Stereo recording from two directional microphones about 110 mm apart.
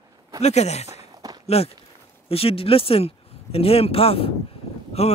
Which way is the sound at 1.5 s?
65° left (ahead or behind).